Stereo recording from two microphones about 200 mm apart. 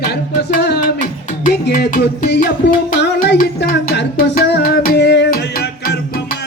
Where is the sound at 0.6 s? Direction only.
55° left (ahead or behind).